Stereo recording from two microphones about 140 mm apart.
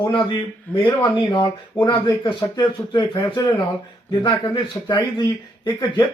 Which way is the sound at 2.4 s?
30° left (ahead or behind).